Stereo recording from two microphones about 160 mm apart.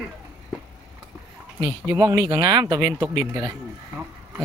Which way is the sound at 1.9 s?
20° right (ahead or behind).